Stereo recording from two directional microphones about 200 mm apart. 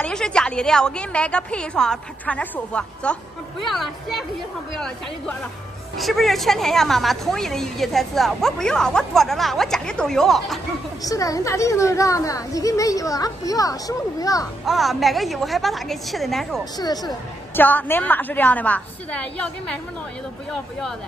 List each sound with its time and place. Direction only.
0.0 s a woman's voice: 5° left (ahead or behind)
11.1 s speech: 15° left (ahead or behind)
14.7 s a woman's voice: centre (ahead or behind)
16.7 s speech: 20° left (ahead or behind)
17.6 s a woman's voice: 10° left (ahead or behind)